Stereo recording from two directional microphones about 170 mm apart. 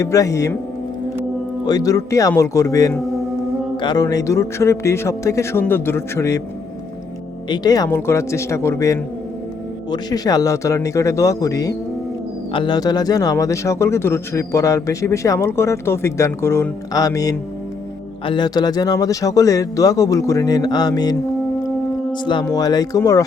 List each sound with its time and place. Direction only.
0.0 s speech: 20° left (ahead or behind)
1.6 s speech: 20° left (ahead or behind)
7.5 s speech: 25° left (ahead or behind)